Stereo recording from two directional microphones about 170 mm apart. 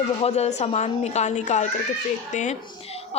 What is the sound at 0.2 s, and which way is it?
A woman's voice, 40° left (ahead or behind).